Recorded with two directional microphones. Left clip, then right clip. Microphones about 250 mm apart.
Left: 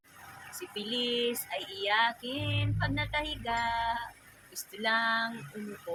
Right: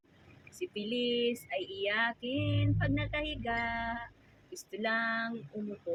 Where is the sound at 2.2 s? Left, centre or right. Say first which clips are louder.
Even; left.